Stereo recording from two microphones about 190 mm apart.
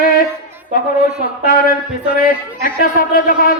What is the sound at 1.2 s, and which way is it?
Speech, 50° left (ahead or behind).